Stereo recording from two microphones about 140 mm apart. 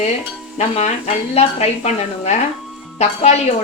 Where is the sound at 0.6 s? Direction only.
50° left (ahead or behind).